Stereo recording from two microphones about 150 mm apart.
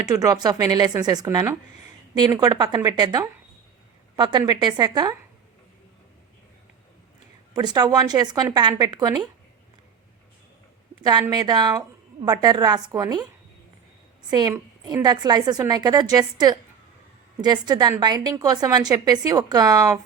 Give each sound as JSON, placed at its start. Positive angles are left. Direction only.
{"t": 0.0, "sound": "a woman's voice", "side_deg": -25}
{"t": 7.5, "sound": "a woman's voice", "side_deg": -25}
{"t": 11.0, "sound": "a woman's voice", "side_deg": -30}
{"t": 14.3, "sound": "a woman's voice", "side_deg": -25}